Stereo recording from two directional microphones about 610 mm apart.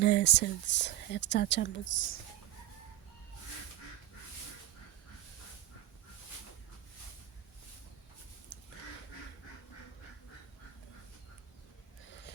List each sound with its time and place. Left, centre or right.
0.0 s speech: centre
8.5 s duck: centre